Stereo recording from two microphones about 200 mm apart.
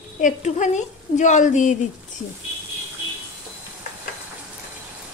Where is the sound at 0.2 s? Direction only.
35° left (ahead or behind).